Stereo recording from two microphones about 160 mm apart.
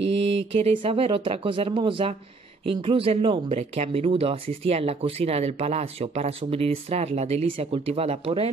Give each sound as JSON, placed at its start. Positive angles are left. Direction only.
{"t": 0.4, "sound": "speech", "side_deg": -40}